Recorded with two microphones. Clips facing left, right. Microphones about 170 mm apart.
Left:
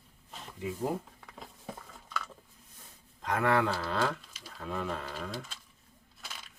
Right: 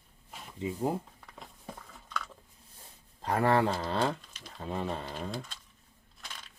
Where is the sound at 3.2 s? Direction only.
35° right (ahead or behind).